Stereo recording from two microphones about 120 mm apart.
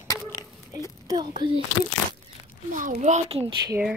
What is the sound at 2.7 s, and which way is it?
Speech, 85° right.